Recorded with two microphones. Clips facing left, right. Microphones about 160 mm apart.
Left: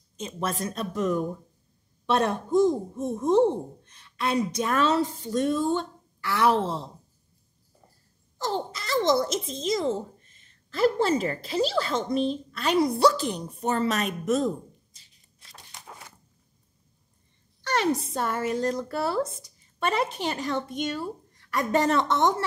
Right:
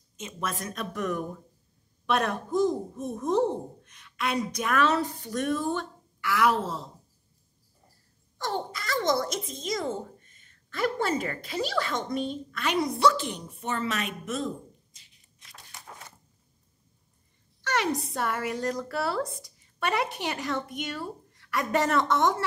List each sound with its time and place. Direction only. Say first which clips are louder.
0.2 s speech: left 4 dB; 30° left (ahead or behind)
8.4 s a child's voice: left 2 dB; 25° left (ahead or behind)
17.6 s speech: left 3 dB; 30° left (ahead or behind)